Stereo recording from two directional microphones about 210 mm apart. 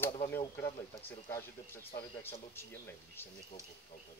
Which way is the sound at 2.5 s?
10° left (ahead or behind).